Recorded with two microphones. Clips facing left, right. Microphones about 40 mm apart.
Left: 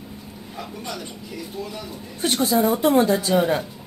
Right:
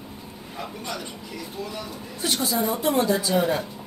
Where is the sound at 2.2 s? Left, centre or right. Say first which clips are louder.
Left 5 dB; left.